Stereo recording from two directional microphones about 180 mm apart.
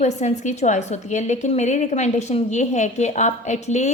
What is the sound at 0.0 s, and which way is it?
A woman's voice, 40° left (ahead or behind).